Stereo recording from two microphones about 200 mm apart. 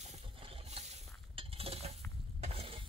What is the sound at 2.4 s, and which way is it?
Frying, 30° right (ahead or behind).